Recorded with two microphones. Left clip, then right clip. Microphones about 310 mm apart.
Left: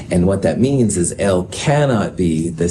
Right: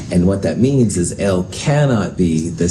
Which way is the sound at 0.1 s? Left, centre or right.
Left.